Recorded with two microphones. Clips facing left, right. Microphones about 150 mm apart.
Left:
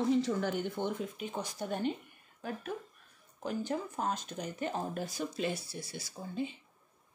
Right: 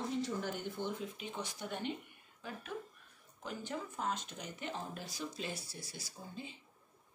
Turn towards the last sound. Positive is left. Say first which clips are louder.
# left 10 dB
turn(degrees=65)  # may be behind; listen again after turning